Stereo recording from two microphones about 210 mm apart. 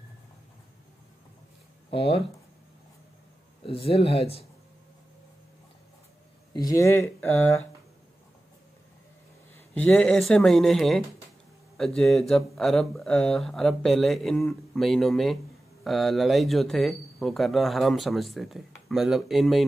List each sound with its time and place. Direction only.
1.9 s speech: 25° left (ahead or behind)
3.6 s speech: 25° left (ahead or behind)
6.5 s speech: 15° left (ahead or behind)
9.8 s speech: 5° left (ahead or behind)